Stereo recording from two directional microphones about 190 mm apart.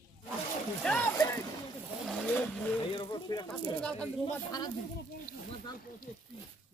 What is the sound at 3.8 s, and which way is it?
Speech, 5° left (ahead or behind).